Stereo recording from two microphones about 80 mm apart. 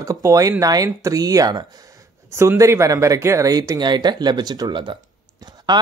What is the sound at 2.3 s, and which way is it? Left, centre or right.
Speech, right.